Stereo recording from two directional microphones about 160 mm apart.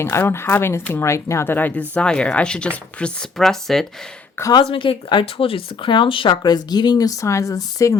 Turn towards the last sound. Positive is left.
turn(degrees=20)  # may be behind; listen again after turning